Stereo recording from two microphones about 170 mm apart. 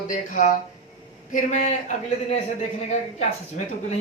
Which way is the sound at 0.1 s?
50° left (ahead or behind).